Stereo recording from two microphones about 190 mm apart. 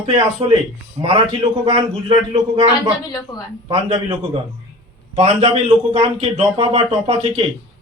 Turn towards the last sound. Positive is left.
turn(degrees=-30)  # may be behind; listen again after turning